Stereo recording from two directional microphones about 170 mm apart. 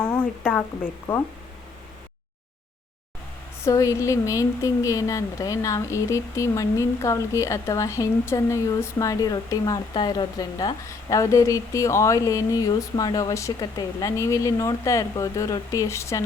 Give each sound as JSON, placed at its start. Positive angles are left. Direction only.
{"t": 0.0, "sound": "speech", "side_deg": 5}
{"t": 3.6, "sound": "speech", "side_deg": 20}